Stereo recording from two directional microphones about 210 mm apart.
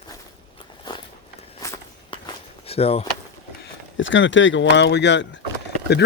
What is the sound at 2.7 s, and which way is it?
Speech, 30° left (ahead or behind).